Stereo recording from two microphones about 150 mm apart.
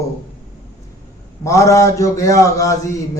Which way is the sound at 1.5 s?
20° left (ahead or behind).